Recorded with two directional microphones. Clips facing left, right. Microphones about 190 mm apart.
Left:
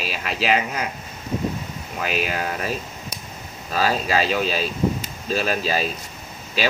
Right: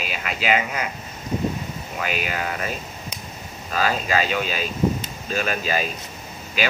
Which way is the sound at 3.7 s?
35° left (ahead or behind).